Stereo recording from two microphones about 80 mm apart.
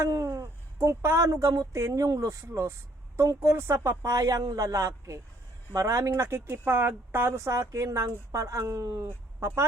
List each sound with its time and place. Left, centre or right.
0.1 s speech: right
4.1 s a man's voice: right
9.0 s speech: right